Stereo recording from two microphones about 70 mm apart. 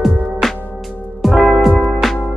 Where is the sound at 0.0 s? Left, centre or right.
Centre.